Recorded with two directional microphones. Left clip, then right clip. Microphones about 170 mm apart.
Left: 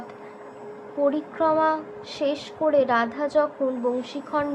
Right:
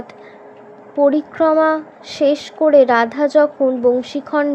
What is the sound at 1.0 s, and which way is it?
A woman's voice, 40° right (ahead or behind).